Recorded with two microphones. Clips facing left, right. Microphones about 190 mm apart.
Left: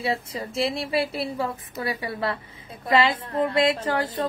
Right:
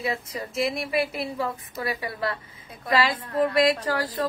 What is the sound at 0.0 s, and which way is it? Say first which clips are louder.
A woman's voice: left 2 dB; 30° left (ahead or behind).